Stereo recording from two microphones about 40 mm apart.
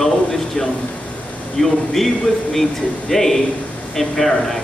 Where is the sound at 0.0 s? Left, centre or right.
Centre.